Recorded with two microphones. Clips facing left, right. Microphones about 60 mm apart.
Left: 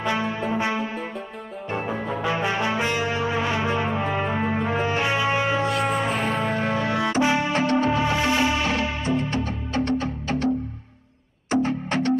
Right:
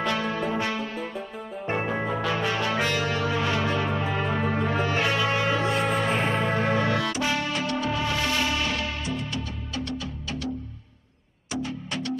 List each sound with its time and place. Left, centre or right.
0.0 s music: centre
2.2 s music: left
6.1 s music: right
6.8 s music: left
11.5 s music: left